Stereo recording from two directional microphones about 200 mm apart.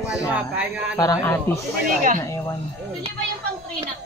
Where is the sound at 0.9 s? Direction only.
20° left (ahead or behind).